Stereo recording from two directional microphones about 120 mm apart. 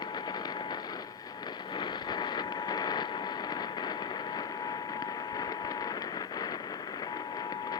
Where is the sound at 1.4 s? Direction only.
40° left (ahead or behind).